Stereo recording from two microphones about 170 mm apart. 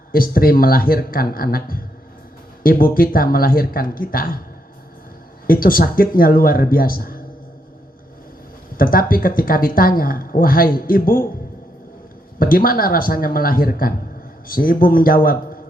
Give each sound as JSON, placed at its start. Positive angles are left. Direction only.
{"t": 0.1, "sound": "speech", "side_deg": 60}
{"t": 5.5, "sound": "speech", "side_deg": 55}
{"t": 8.8, "sound": "speech", "side_deg": 55}
{"t": 12.4, "sound": "speech", "side_deg": 55}